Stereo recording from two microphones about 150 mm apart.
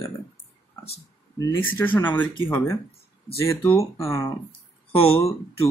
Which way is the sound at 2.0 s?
10° left (ahead or behind).